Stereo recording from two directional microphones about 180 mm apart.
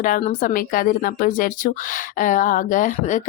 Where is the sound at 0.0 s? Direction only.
45° left (ahead or behind).